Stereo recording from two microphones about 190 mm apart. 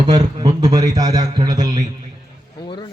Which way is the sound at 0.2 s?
20° right (ahead or behind).